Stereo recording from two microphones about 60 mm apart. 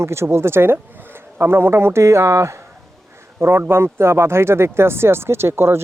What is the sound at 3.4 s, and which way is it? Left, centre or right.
Speech, right.